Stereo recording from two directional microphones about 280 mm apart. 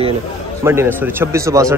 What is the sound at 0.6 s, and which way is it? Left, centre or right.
Speech, centre.